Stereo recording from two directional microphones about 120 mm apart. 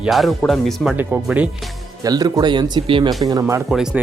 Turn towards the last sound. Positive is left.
turn(degrees=-5)  # may be behind; listen again after turning